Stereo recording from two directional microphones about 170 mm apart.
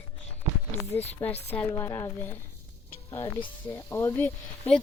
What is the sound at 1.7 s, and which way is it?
Speech, 15° left (ahead or behind).